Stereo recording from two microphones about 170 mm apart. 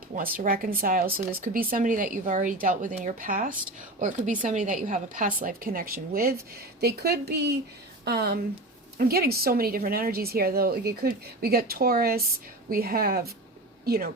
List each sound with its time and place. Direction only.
0.2 s a woman's voice: 60° right (ahead or behind)